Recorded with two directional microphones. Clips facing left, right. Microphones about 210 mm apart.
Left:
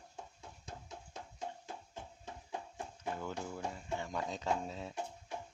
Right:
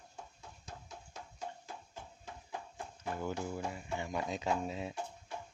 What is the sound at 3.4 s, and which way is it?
Speech, 10° right (ahead or behind).